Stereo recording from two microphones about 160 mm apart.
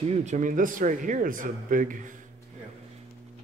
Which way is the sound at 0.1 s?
45° right (ahead or behind).